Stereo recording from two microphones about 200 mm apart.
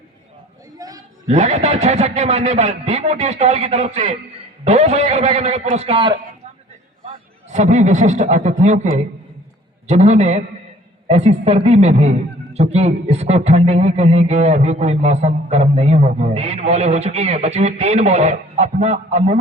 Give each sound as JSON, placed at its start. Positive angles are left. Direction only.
{"t": 0.8, "sound": "a sound", "side_deg": -15}
{"t": 1.3, "sound": "speech", "side_deg": -35}
{"t": 7.5, "sound": "speech", "side_deg": -35}